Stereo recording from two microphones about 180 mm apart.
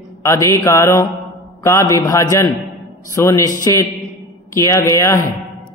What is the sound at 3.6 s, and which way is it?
Speech, 20° left (ahead or behind).